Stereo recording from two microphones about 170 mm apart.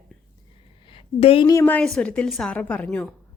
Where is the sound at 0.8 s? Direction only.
35° left (ahead or behind).